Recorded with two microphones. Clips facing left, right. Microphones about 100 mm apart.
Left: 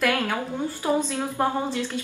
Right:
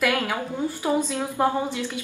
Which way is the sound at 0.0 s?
5° right (ahead or behind).